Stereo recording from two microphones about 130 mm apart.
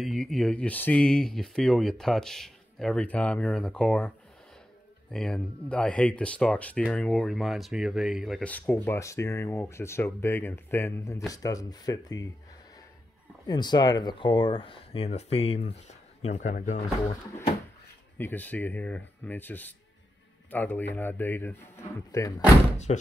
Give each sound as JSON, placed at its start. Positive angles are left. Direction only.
{"t": 0.0, "sound": "speech", "side_deg": 0}
{"t": 5.1, "sound": "speech", "side_deg": 5}
{"t": 8.5, "sound": "speech", "side_deg": 10}
{"t": 13.5, "sound": "speech", "side_deg": 35}
{"t": 16.3, "sound": "speech", "side_deg": 70}
{"t": 18.1, "sound": "speech", "side_deg": 15}
{"t": 22.9, "sound": "speech", "side_deg": 55}